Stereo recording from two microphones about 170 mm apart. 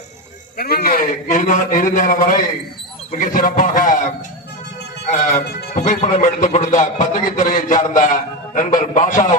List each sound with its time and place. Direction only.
0.5 s a man's voice: 60° left (ahead or behind)
5.7 s a man's voice: 45° left (ahead or behind)